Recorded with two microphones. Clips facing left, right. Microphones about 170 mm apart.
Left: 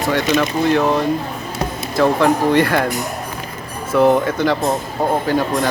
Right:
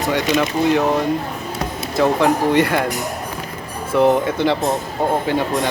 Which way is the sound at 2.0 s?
15° right (ahead or behind).